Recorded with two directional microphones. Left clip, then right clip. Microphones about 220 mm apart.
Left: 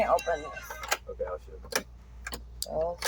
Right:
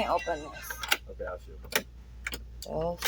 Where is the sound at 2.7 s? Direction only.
30° right (ahead or behind).